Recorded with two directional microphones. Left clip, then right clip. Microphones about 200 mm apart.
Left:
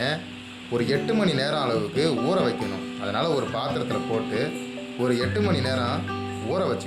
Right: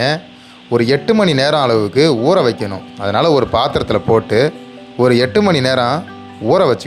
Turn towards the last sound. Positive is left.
turn(degrees=-50)  # may be behind; listen again after turning